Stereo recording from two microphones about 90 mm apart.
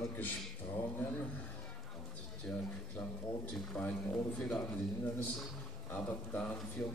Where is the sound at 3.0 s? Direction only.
10° left (ahead or behind).